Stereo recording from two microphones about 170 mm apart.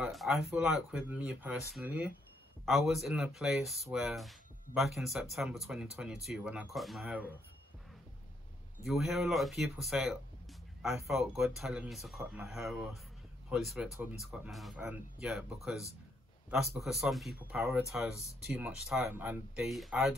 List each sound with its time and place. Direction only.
0.0 s speech: centre (ahead or behind)
8.8 s speech: centre (ahead or behind)